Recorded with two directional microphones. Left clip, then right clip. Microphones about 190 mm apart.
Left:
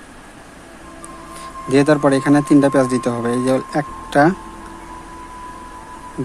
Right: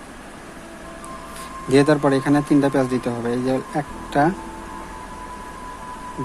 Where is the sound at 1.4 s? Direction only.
10° left (ahead or behind).